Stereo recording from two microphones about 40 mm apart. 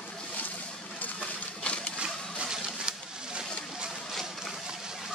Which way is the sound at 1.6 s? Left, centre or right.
Left.